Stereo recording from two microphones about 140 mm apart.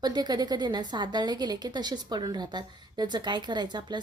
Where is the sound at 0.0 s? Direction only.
30° right (ahead or behind).